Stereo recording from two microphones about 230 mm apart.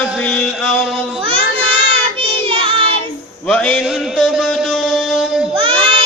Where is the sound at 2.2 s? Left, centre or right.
Right.